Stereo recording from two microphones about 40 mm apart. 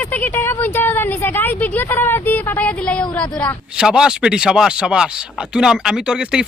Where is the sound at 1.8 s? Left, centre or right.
Left.